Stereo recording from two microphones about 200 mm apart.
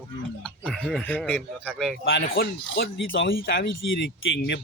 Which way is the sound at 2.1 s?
50° left (ahead or behind).